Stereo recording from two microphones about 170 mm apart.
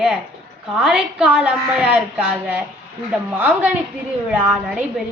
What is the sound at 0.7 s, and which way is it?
A woman's voice, 5° right (ahead or behind).